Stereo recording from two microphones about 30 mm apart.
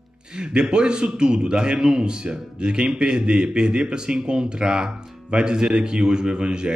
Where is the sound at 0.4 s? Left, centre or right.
Right.